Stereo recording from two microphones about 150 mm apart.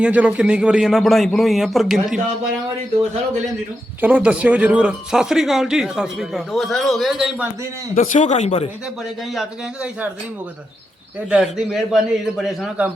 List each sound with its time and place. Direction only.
0.0 s speech: 10° right (ahead or behind)
4.0 s speech: 10° right (ahead or behind)
7.9 s speech: 55° left (ahead or behind)
9.3 s speech: 5° right (ahead or behind)
11.3 s speech: 5° right (ahead or behind)